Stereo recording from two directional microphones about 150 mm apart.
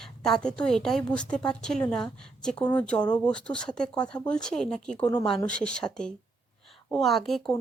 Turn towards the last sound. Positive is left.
turn(degrees=0)  # may be behind; listen again after turning